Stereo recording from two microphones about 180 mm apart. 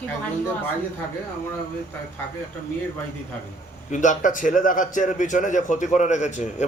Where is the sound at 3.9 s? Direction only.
45° left (ahead or behind).